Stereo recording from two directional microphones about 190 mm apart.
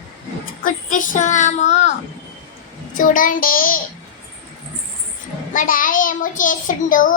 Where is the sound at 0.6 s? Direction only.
45° left (ahead or behind).